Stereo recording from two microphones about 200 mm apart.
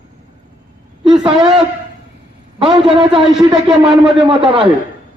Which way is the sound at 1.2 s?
20° right (ahead or behind).